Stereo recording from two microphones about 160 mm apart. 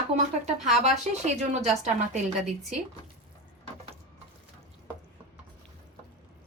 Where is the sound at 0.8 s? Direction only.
45° right (ahead or behind).